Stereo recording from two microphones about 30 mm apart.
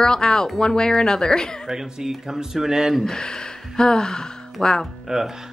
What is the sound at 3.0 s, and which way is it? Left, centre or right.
Speech, left.